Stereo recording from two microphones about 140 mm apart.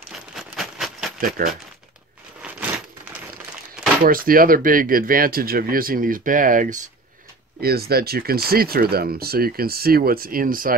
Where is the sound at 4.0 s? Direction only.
90° right; by 6.8 s 70° right (ahead or behind).